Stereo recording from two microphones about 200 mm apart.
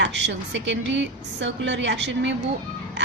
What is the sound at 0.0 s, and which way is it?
A woman's voice, 60° right (ahead or behind).